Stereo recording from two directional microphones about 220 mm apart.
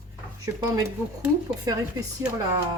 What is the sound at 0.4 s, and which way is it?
Speech, 15° right (ahead or behind).